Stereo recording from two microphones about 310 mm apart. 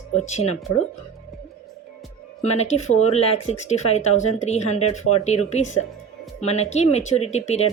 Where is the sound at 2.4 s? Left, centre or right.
Left.